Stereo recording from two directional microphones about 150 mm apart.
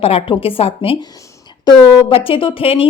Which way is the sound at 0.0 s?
40° left (ahead or behind).